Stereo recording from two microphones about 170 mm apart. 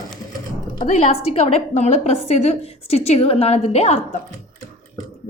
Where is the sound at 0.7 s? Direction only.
45° left (ahead or behind).